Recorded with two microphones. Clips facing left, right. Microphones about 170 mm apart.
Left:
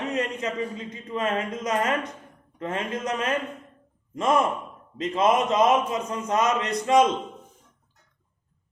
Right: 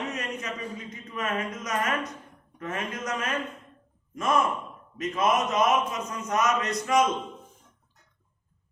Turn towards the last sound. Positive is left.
turn(degrees=30)  # may be behind; listen again after turning